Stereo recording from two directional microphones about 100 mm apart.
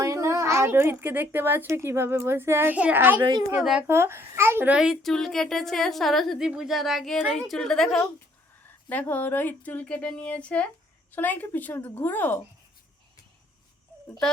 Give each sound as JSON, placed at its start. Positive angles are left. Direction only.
{"t": 0.0, "sound": "a woman's voice", "side_deg": -30}
{"t": 3.6, "sound": "a woman's voice", "side_deg": -5}
{"t": 3.8, "sound": "a child's voice", "side_deg": -25}
{"t": 4.8, "sound": "a woman's voice", "side_deg": 0}
{"t": 8.6, "sound": "a woman's voice", "side_deg": 15}